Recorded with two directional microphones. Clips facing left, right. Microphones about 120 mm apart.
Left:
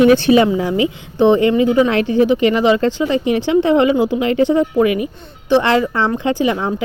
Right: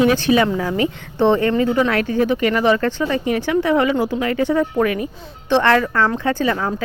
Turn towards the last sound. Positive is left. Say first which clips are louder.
# left 2 dB
turn(degrees=15)  # may be behind; listen again after turning